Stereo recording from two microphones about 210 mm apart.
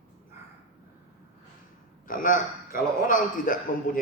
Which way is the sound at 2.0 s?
40° left (ahead or behind).